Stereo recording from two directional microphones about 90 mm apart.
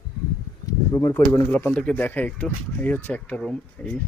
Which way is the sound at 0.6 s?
40° left (ahead or behind).